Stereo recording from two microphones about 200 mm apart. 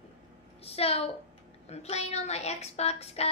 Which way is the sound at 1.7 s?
30° left (ahead or behind).